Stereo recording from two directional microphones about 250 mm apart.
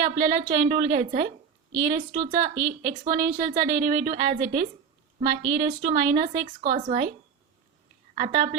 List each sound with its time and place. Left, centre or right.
0.0 s a woman's voice: right
8.1 s a woman's voice: right